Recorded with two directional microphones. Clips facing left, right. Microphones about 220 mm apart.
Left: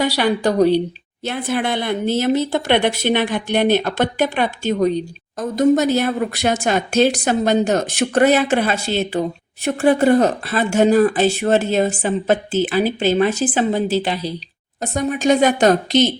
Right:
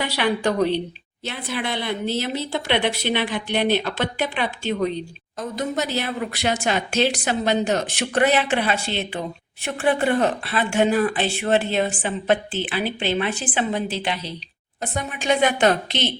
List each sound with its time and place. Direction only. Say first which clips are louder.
0.0 s speech: left 5 dB; 40° left (ahead or behind)
1.2 s speech: left 7 dB; 50° left (ahead or behind)